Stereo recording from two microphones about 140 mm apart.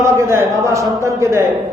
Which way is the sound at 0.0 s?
20° right (ahead or behind).